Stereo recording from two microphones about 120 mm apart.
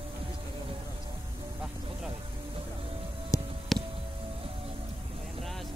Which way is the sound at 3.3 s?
25° left (ahead or behind).